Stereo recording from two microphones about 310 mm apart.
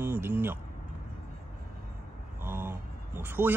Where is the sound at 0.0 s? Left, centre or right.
Centre.